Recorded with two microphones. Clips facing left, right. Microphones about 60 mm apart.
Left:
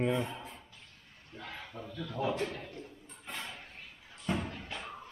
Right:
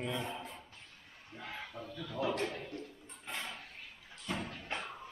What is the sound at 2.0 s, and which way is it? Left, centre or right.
Speech, centre.